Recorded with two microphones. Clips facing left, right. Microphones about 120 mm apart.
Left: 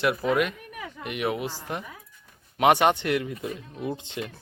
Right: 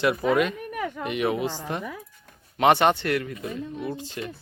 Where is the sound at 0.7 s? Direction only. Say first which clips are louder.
Right 9 dB; 60° right (ahead or behind).